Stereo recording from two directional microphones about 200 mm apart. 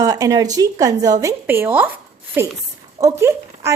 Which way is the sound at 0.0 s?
15° right (ahead or behind).